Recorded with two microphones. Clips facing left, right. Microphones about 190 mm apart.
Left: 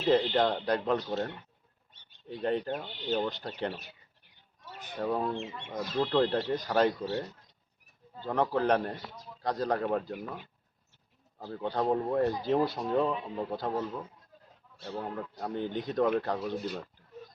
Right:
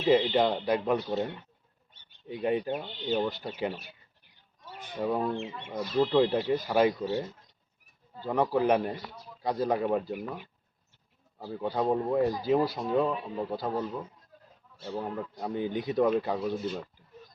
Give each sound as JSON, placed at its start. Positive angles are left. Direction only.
{"t": 0.0, "sound": "a man's voice", "side_deg": -5}
{"t": 4.9, "sound": "a man's voice", "side_deg": -5}
{"t": 8.2, "sound": "a man's voice", "side_deg": -10}